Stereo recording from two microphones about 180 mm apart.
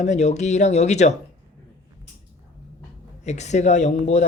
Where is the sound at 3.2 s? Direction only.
40° left (ahead or behind).